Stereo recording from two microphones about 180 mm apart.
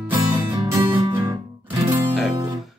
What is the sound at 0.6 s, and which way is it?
Music, 20° right (ahead or behind).